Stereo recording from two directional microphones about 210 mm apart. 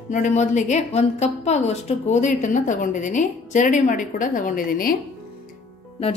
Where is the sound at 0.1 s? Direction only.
35° left (ahead or behind).